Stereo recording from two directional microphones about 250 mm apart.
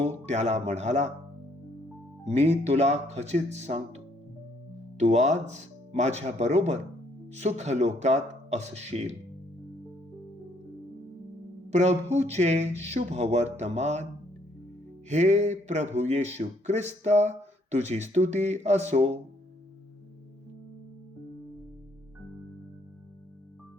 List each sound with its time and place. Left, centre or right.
0.0 s speech: right
2.2 s speech: right
11.7 s speech: right
15.1 s speech: right